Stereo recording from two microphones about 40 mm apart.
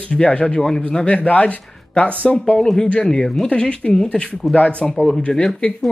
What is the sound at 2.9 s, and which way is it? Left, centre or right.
Speech, left.